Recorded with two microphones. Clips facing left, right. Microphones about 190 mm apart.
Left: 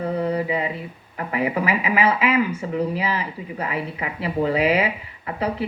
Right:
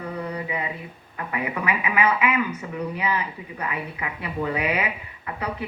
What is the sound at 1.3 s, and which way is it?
Speech, 30° left (ahead or behind).